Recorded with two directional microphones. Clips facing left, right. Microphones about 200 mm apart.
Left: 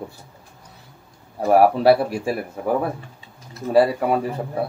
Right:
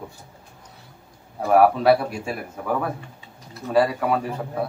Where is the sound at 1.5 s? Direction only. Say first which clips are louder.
Left 2 dB; 30° left (ahead or behind).